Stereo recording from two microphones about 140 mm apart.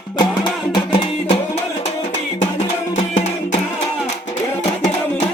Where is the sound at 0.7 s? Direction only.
35° left (ahead or behind).